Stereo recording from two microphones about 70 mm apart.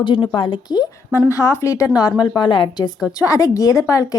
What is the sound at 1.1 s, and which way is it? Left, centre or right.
Speech, left.